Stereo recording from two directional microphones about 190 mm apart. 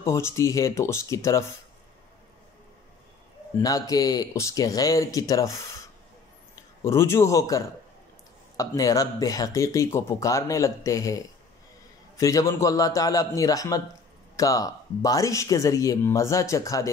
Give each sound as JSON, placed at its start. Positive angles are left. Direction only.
{"t": 0.0, "sound": "speech", "side_deg": 15}
{"t": 3.6, "sound": "speech", "side_deg": 20}
{"t": 6.8, "sound": "speech", "side_deg": 15}